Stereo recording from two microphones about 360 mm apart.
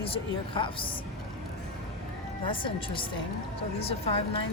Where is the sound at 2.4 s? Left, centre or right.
Centre.